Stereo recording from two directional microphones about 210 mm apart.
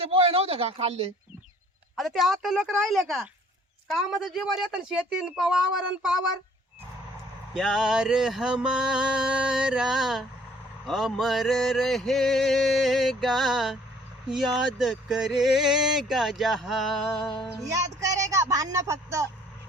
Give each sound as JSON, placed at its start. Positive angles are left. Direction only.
{"t": 0.0, "sound": "speech", "side_deg": -25}
{"t": 2.0, "sound": "speech", "side_deg": 0}
{"t": 7.5, "sound": "speech", "side_deg": 0}
{"t": 17.7, "sound": "speech", "side_deg": -15}